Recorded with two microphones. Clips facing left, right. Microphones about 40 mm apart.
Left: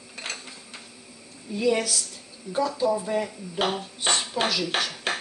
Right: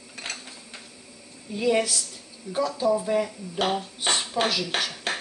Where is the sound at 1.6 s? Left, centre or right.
Centre.